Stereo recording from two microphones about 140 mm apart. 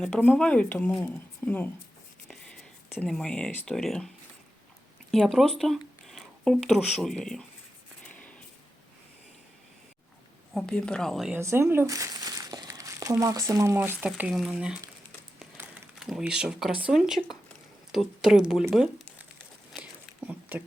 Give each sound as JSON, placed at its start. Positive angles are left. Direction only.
{"t": 0.0, "sound": "speech", "side_deg": 10}
{"t": 3.1, "sound": "speech", "side_deg": 5}
{"t": 5.1, "sound": "speech", "side_deg": 0}
{"t": 8.0, "sound": "a sound", "side_deg": 10}
{"t": 10.5, "sound": "speech", "side_deg": 5}
{"t": 11.3, "sound": "speech", "side_deg": -20}
{"t": 16.0, "sound": "speech", "side_deg": -5}
{"t": 19.7, "sound": "a sound", "side_deg": -10}